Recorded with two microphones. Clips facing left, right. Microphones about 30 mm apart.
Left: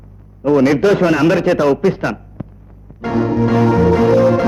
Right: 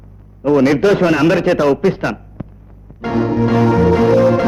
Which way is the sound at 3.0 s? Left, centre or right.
Centre.